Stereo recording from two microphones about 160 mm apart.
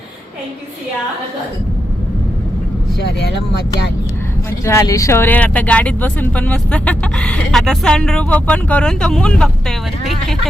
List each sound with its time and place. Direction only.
3.0 s speech: 90° left
4.6 s speech: 20° left (ahead or behind)